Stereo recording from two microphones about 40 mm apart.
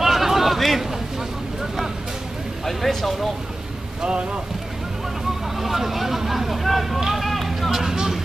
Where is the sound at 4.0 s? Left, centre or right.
Right.